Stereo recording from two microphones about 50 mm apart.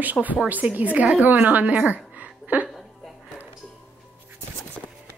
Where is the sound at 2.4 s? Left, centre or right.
Right.